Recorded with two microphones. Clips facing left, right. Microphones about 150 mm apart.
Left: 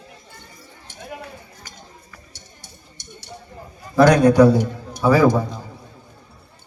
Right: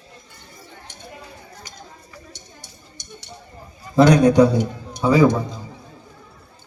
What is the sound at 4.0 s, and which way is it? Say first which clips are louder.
A man's voice: left 1 dB; 20° right (ahead or behind).